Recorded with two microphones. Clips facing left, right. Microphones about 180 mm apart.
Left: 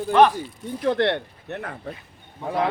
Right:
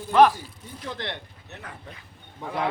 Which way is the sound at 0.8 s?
60° left (ahead or behind).